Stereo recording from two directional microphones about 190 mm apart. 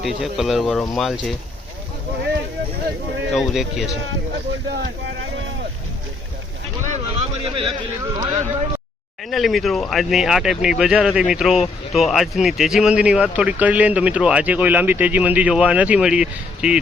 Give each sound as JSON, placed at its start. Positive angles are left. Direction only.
{"t": 0.0, "sound": "speech", "side_deg": 0}
{"t": 3.3, "sound": "speech", "side_deg": 0}
{"t": 6.8, "sound": "a sound", "side_deg": -35}
{"t": 8.0, "sound": "speech", "side_deg": -20}
{"t": 9.3, "sound": "speech", "side_deg": 0}